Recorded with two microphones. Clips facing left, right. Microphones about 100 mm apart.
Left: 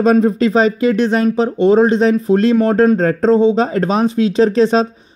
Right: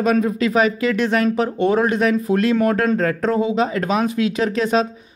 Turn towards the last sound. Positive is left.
turn(degrees=30)  # may be behind; listen again after turning